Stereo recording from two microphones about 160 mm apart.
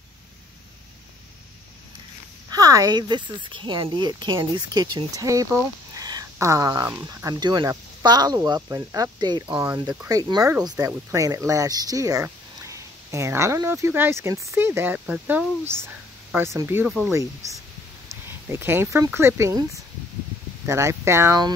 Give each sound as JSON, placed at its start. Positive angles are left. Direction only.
{"t": 2.5, "sound": "speech", "side_deg": -20}